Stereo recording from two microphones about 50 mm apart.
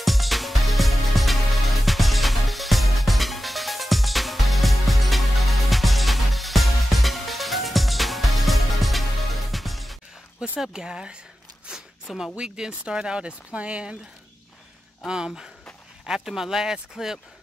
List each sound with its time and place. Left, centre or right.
0.0 s music: centre
10.6 s speech: centre
11.7 s a sound: centre
12.4 s speech: centre
15.0 s speech: centre